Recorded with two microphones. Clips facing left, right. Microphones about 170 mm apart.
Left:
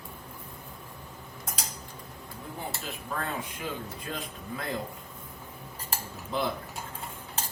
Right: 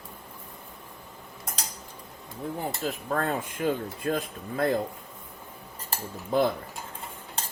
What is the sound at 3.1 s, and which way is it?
Speech, 50° right (ahead or behind).